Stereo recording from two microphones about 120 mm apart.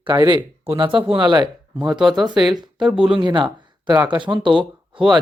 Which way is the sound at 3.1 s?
40° right (ahead or behind).